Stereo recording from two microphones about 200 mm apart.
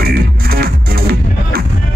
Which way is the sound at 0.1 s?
50° right (ahead or behind).